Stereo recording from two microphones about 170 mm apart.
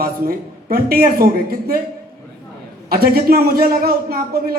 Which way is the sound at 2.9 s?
60° right (ahead or behind).